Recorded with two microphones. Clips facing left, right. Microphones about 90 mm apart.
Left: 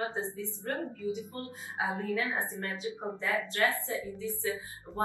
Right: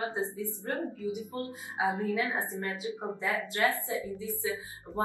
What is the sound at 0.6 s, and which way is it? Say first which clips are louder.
A woman's voice: even; 20° right (ahead or behind).